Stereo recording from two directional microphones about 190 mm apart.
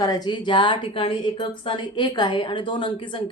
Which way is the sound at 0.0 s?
20° left (ahead or behind).